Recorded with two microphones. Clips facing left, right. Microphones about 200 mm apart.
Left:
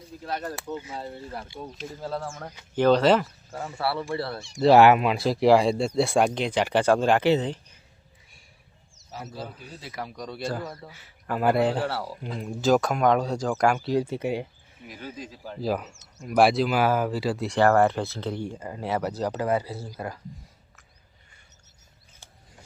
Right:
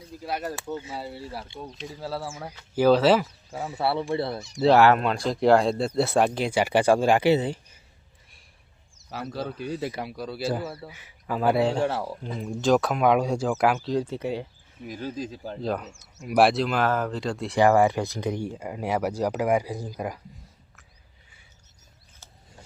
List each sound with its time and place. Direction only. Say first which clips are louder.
0.2 s speech: right 1 dB; 10° right (ahead or behind)
3.8 s speech: right 3 dB; 20° right (ahead or behind)
4.7 s speech: left 2 dB; 15° left (ahead or behind); by 7.8 s 10° right (ahead or behind)
9.3 s speech: right 8 dB; 75° right (ahead or behind)
10.0 s speech: right 2 dB; 5° right (ahead or behind)
11.3 s speech: even; centre (ahead or behind)
11.8 s speech: right 3 dB; 20° right (ahead or behind)
12.4 s speech: even; centre (ahead or behind)
13.7 s speech: left 1 dB; 10° left (ahead or behind)
15.0 s speech: right 5 dB; 35° right (ahead or behind)
15.6 s speech: left 2 dB; 5° left (ahead or behind)
17.6 s speech: right 1 dB; 10° right (ahead or behind)